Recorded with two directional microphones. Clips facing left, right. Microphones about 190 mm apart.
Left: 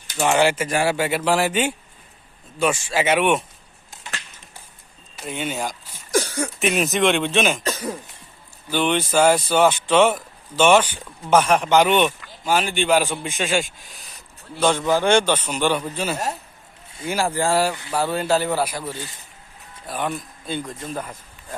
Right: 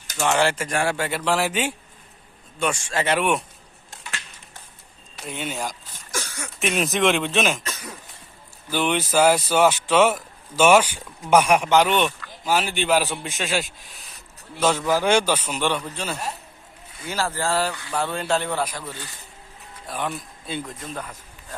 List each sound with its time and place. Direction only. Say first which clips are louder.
0.3 s a man's voice: left 4 dB; 5° left (ahead or behind)
5.1 s speech: left 3 dB; centre (ahead or behind)
6.1 s a sound: left 11 dB; 35° left (ahead or behind)
6.6 s a man's voice: left 1 dB; centre (ahead or behind)
7.6 s speech: left 9 dB; 30° left (ahead or behind)
8.7 s speech: left 2 dB; 5° right (ahead or behind)
11.7 s a man's voice: left 2 dB; centre (ahead or behind)
17.1 s a man's voice: left 4 dB; 15° left (ahead or behind); by 20.7 s centre (ahead or behind)
20.8 s a man's voice: left 4 dB; 10° left (ahead or behind)